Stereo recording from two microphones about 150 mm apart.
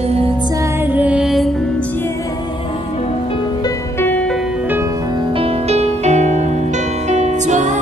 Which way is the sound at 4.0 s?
10° left (ahead or behind).